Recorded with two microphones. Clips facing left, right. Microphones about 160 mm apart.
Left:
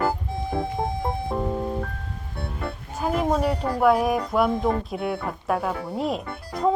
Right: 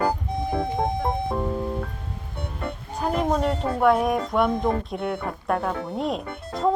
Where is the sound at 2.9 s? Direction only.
Centre (ahead or behind).